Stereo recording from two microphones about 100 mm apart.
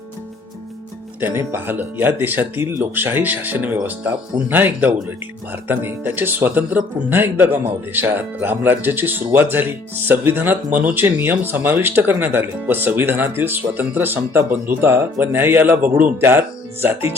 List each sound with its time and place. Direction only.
1.2 s speech: 25° right (ahead or behind)